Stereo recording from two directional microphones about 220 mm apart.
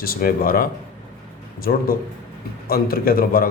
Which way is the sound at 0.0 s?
40° left (ahead or behind).